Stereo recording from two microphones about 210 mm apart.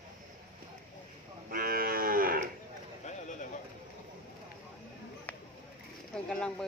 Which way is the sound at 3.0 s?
35° left (ahead or behind).